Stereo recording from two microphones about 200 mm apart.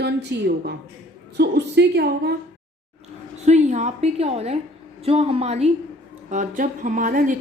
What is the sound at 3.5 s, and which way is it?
Speech, 35° right (ahead or behind).